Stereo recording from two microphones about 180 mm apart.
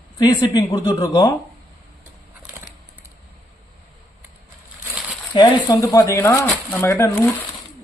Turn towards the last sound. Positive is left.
turn(degrees=10)  # may be behind; listen again after turning